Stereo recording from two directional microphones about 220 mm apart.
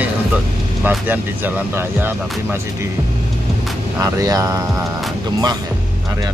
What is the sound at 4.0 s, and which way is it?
Speech, 15° right (ahead or behind).